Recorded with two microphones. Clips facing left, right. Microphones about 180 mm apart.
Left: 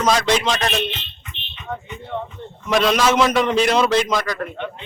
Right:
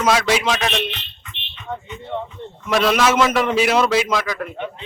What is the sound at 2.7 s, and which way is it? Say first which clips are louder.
A man's voice: even; 5° right (ahead or behind).